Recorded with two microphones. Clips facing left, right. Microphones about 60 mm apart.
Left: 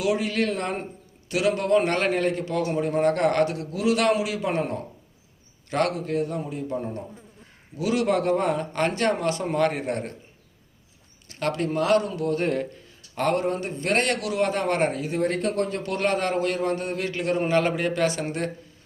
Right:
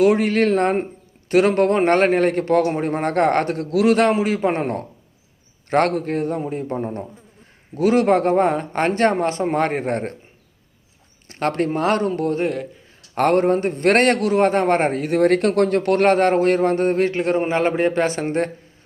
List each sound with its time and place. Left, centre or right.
0.0 s a man's voice: right
3.7 s a man's voice: right
3.9 s speech: right
11.3 s a man's voice: right
15.0 s speech: right